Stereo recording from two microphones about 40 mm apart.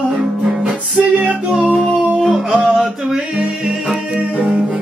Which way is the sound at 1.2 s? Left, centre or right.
Right.